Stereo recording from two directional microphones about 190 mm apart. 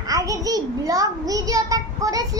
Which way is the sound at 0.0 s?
20° right (ahead or behind).